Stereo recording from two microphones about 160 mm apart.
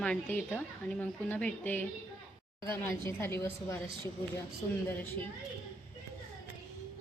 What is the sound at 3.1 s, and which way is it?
A woman's voice, 15° left (ahead or behind).